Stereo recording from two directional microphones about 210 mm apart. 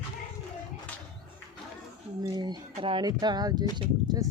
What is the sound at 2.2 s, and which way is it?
Speech, 20° right (ahead or behind).